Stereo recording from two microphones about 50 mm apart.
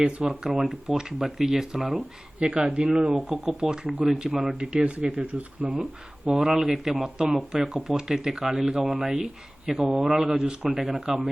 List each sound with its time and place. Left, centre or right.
0.0 s speech: right
0.3 s speech: centre
2.6 s speech: centre
4.4 s speech: right
6.3 s speech: centre